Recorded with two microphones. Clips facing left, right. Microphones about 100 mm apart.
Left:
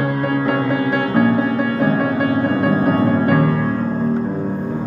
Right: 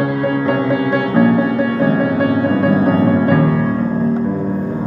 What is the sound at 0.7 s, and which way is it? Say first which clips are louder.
Music: right 2 dB; 35° left (ahead or behind).